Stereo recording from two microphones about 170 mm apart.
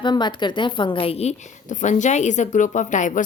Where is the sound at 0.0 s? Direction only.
25° left (ahead or behind).